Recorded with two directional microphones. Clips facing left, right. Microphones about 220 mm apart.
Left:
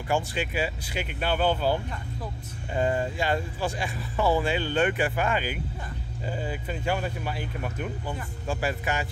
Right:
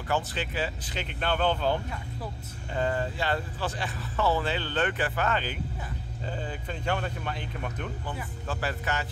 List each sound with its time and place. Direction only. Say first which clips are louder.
0.1 s speech: left 3 dB; 10° left (ahead or behind)